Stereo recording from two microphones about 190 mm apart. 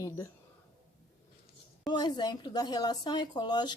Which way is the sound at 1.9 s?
25° left (ahead or behind).